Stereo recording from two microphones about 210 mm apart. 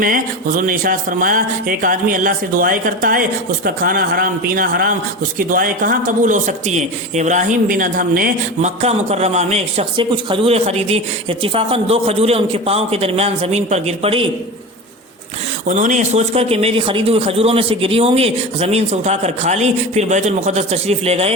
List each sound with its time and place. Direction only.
0.0 s a man's voice: 40° right (ahead or behind)
15.6 s speech: 35° right (ahead or behind)